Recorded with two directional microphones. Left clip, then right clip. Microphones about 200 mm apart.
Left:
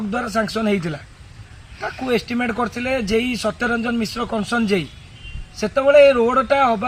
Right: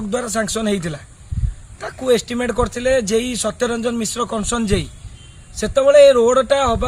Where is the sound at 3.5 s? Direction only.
20° right (ahead or behind).